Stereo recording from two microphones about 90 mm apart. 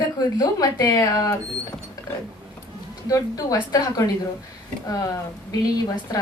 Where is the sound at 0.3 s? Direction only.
40° left (ahead or behind).